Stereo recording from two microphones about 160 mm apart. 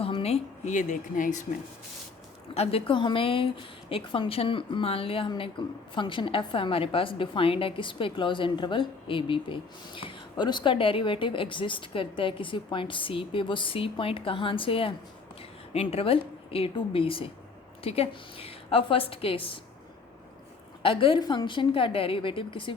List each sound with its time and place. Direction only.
0.0 s a woman's voice: 40° left (ahead or behind); by 1.5 s 55° left (ahead or behind)
2.6 s a woman's voice: 35° left (ahead or behind)
20.8 s a woman's voice: 35° left (ahead or behind)